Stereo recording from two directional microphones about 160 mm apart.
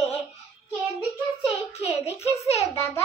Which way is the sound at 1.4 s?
40° left (ahead or behind).